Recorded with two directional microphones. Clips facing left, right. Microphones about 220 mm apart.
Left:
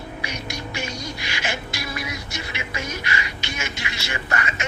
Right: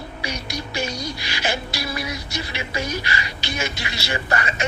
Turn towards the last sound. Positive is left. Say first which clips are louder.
# right 3 dB
turn(degrees=-35)  # may be behind; listen again after turning